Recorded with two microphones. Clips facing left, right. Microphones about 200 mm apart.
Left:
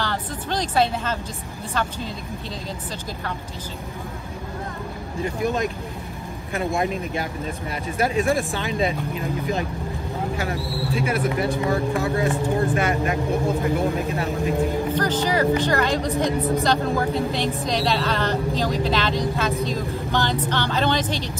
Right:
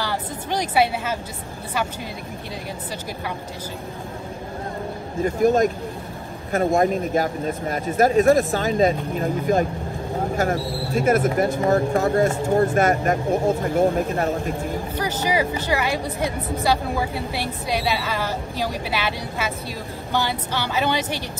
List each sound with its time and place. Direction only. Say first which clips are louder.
0.0 s speech: even; 10° right (ahead or behind)
5.2 s speech: right 6 dB; 45° right (ahead or behind)
15.0 s a woman's voice: even; 10° right (ahead or behind)